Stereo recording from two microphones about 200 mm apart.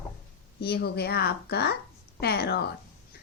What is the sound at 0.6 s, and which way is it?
A woman's voice, 50° left (ahead or behind).